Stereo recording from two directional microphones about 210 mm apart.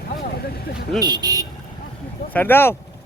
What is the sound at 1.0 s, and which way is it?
Speech, 20° right (ahead or behind).